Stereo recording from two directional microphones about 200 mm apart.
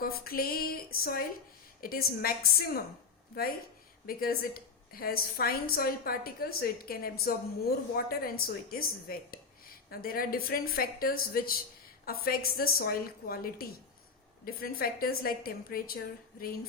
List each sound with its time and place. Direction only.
0.0 s speech: 50° left (ahead or behind)